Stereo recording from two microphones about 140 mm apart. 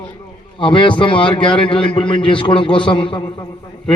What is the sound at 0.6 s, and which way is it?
A man's voice, 35° left (ahead or behind).